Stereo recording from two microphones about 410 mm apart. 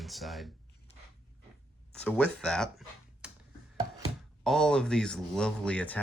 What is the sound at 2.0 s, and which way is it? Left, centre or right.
Speech, centre.